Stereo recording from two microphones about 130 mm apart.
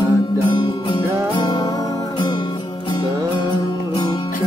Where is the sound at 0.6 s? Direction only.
35° left (ahead or behind).